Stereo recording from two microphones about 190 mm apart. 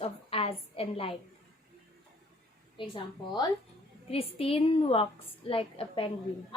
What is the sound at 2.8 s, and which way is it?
Speech, 25° left (ahead or behind).